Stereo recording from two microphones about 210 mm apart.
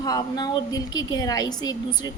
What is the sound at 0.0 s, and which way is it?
A woman's voice, 20° left (ahead or behind).